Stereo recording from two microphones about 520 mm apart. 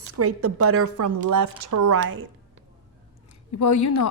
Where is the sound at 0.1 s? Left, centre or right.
Right.